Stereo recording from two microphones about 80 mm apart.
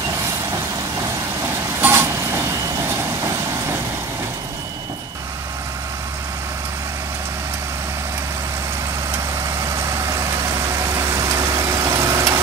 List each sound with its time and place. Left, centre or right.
1.8 s vehicle: right
9.8 s vehicle: right